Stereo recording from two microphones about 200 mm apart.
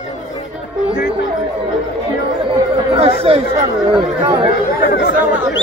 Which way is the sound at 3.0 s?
30° right (ahead or behind).